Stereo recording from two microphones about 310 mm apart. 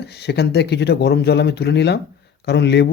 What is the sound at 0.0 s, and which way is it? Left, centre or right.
Speech, left.